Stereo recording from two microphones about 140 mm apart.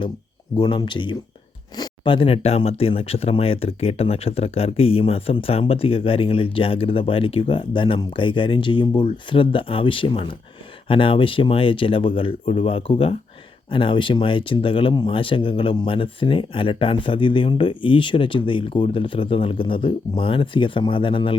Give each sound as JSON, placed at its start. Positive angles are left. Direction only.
{"t": 0.5, "sound": "speech", "side_deg": 30}